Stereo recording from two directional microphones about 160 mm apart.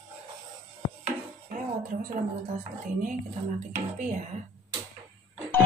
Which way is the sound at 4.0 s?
50° right (ahead or behind).